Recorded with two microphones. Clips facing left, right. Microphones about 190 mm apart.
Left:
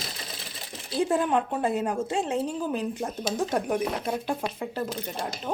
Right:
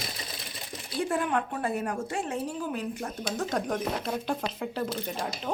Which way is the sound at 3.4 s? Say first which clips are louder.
Left 3 dB; 10° left (ahead or behind).